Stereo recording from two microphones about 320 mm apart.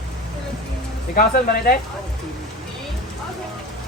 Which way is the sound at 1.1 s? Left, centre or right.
Left.